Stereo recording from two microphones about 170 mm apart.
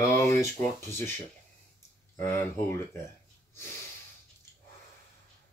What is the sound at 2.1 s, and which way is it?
Speech, 15° left (ahead or behind).